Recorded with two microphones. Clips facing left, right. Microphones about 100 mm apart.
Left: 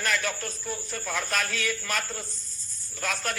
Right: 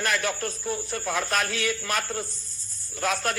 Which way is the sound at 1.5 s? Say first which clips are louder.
Right 3 dB; 55° right (ahead or behind).